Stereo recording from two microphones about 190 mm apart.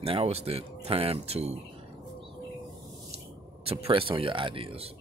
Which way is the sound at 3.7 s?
30° right (ahead or behind).